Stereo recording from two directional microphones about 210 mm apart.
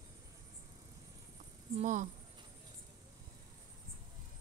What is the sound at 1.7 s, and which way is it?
Speech, 35° right (ahead or behind).